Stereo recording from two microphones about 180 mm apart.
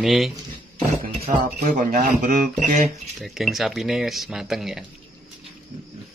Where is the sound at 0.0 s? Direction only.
Centre (ahead or behind).